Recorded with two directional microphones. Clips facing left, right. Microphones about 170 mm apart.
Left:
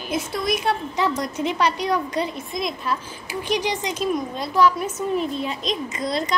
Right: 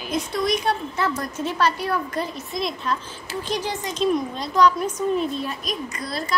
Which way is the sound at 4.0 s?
5° left (ahead or behind).